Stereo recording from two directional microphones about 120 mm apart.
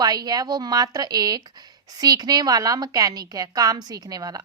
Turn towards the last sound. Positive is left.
turn(degrees=-30)  # may be behind; listen again after turning